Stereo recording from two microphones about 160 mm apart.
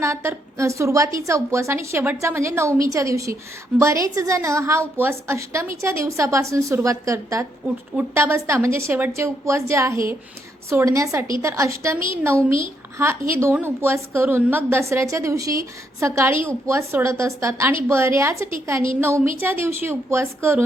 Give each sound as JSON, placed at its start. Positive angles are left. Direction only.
{"t": 0.0, "sound": "a woman's voice", "side_deg": -15}